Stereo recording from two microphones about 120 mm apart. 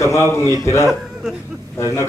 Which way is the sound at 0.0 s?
25° left (ahead or behind).